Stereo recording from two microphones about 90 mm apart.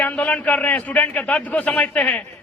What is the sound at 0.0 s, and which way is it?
A man's voice, 20° left (ahead or behind).